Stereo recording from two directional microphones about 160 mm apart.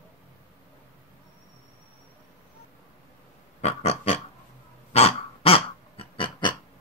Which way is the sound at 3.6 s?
40° left (ahead or behind).